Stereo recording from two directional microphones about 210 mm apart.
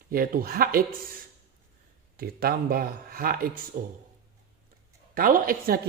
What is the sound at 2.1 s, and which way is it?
A woman's voice, 45° right (ahead or behind).